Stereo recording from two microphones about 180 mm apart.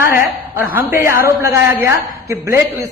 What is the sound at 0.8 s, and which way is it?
A woman's voice, 10° right (ahead or behind).